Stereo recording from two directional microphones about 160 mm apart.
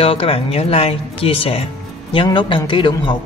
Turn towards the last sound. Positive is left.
turn(degrees=30)  # may be behind; listen again after turning